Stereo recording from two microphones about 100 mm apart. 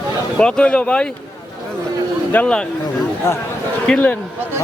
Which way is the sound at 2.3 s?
10° left (ahead or behind).